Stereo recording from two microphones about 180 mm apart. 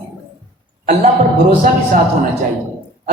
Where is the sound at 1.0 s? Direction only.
40° right (ahead or behind).